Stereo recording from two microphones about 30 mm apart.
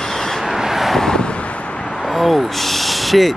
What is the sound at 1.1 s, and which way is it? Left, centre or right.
Vehicle, left.